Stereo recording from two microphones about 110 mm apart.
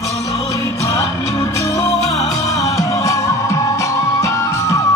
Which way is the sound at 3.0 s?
30° left (ahead or behind).